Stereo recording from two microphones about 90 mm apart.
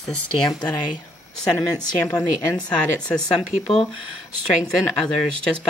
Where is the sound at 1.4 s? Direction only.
45° left (ahead or behind).